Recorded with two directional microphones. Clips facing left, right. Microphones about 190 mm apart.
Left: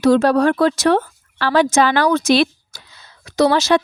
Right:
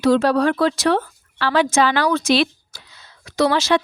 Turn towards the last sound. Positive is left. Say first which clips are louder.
# left 3 dB
turn(degrees=45)  # may be behind; listen again after turning